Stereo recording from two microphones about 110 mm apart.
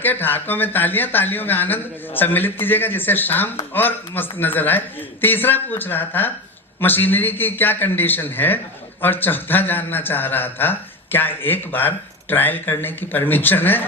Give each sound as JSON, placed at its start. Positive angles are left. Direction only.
{"t": 0.0, "sound": "a man's voice", "side_deg": 15}